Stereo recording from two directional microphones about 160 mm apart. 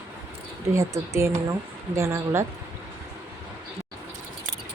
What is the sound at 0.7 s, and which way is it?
Speech, 20° right (ahead or behind).